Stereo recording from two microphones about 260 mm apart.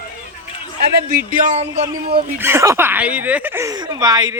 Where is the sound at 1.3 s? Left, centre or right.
Right.